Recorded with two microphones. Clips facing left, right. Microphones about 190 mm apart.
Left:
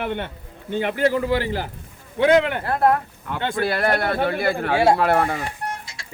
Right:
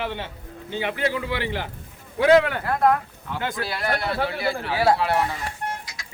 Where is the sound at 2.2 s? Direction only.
25° left (ahead or behind).